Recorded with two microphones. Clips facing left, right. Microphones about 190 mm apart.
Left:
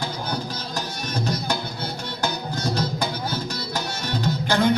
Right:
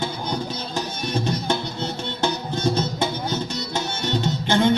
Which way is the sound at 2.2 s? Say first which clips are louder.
Right 4 dB; 25° right (ahead or behind).